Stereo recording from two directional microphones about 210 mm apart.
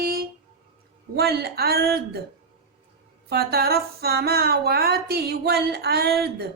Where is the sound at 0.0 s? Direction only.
45° right (ahead or behind).